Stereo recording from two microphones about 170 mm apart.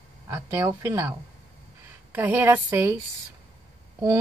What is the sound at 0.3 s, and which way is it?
Speech, 15° right (ahead or behind).